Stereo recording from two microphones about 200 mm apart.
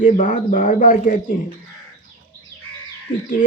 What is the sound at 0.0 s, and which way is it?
Speech, 40° left (ahead or behind).